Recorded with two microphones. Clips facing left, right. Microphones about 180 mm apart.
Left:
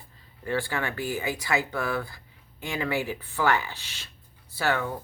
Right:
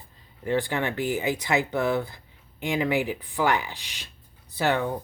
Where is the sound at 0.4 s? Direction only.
20° right (ahead or behind).